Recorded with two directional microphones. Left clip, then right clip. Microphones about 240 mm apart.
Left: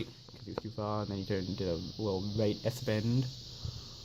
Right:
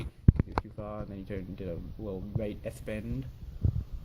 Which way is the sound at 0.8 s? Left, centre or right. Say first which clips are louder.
Left 4 dB; centre.